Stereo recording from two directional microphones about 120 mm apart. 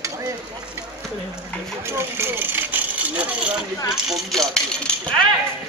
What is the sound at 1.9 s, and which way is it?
Vehicle, 20° right (ahead or behind).